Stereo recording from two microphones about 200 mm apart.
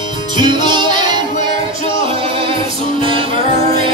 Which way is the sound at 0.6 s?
25° right (ahead or behind).